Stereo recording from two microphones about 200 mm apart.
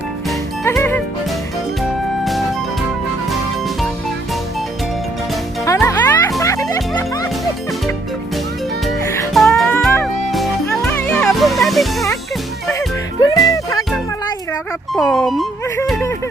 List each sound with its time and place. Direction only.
0.7 s music: 10° left (ahead or behind)
5.6 s music: 15° left (ahead or behind)
9.3 s music: centre (ahead or behind)
13.2 s music: 15° left (ahead or behind)
14.9 s music: centre (ahead or behind)
15.6 s music: 15° left (ahead or behind)
15.9 s a sound: 10° left (ahead or behind)